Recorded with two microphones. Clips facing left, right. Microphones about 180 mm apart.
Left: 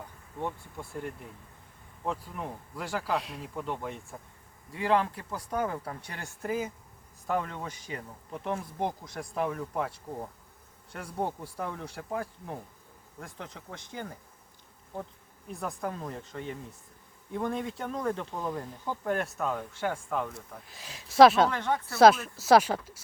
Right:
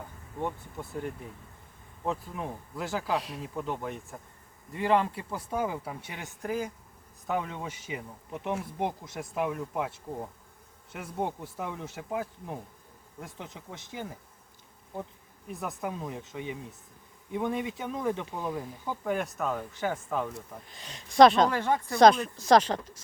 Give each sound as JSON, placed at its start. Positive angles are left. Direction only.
{"t": 0.3, "sound": "speech", "side_deg": -15}
{"t": 0.9, "sound": "speech", "side_deg": 0}
{"t": 6.4, "sound": "speech", "side_deg": 5}
{"t": 15.4, "sound": "speech", "side_deg": 0}
{"t": 21.5, "sound": "speech", "side_deg": -10}
{"t": 21.9, "sound": "speech", "side_deg": 5}